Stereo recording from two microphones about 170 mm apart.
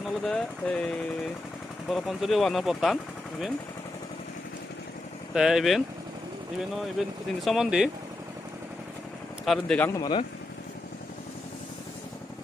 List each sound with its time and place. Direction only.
0.2 s speech: 5° left (ahead or behind)
5.3 s speech: centre (ahead or behind)
7.0 s speech: centre (ahead or behind)
9.4 s speech: 5° left (ahead or behind)
9.9 s speech: 25° left (ahead or behind)